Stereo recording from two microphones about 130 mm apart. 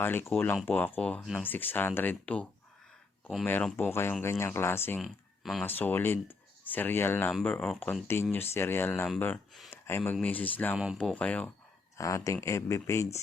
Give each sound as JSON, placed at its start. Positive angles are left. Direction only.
{"t": 0.0, "sound": "speech", "side_deg": 15}
{"t": 1.2, "sound": "speech", "side_deg": 0}
{"t": 1.5, "sound": "speech", "side_deg": 15}
{"t": 4.9, "sound": "speech", "side_deg": 0}
{"t": 5.6, "sound": "speech", "side_deg": 15}
{"t": 8.0, "sound": "speech", "side_deg": 20}
{"t": 11.9, "sound": "speech", "side_deg": 25}